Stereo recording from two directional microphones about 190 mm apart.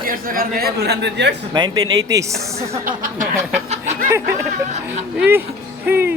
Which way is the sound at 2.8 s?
45° right (ahead or behind).